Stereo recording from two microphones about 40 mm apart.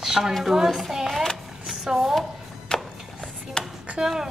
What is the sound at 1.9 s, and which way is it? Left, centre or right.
Speech, centre.